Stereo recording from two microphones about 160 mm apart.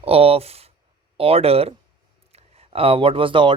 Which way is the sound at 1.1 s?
35° right (ahead or behind).